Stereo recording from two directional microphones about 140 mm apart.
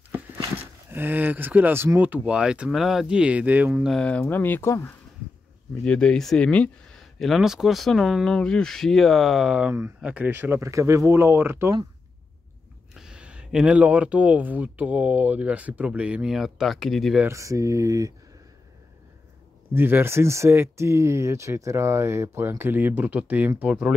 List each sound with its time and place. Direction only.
0.8 s speech: 15° right (ahead or behind)
3.9 s speech: 10° left (ahead or behind)
5.9 s speech: 5° left (ahead or behind); by 11.8 s 20° right (ahead or behind)
12.9 s speech: 5° right (ahead or behind)
17.2 s speech: 20° right (ahead or behind)
19.7 s speech: 15° right (ahead or behind)